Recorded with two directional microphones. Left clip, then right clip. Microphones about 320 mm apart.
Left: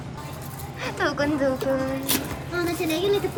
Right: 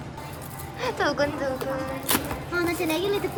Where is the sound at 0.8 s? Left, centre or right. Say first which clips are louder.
Even; centre.